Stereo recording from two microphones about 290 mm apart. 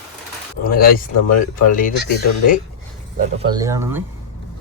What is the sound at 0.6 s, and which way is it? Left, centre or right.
Speech, left.